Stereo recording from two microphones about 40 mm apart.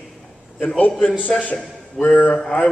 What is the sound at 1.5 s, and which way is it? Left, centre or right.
Speech, left.